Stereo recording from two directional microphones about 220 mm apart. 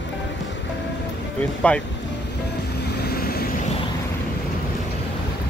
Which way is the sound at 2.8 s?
45° left (ahead or behind).